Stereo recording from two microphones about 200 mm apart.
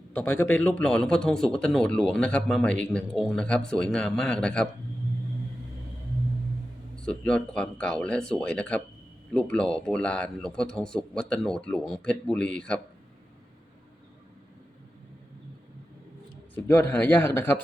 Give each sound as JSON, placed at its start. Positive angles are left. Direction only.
{"t": 0.1, "sound": "speech", "side_deg": 10}
{"t": 6.9, "sound": "speech", "side_deg": 5}
{"t": 16.6, "sound": "speech", "side_deg": 10}